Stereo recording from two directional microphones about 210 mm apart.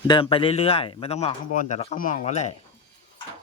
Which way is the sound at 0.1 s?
25° left (ahead or behind).